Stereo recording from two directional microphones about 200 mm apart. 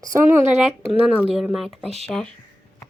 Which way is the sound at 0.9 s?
Centre (ahead or behind).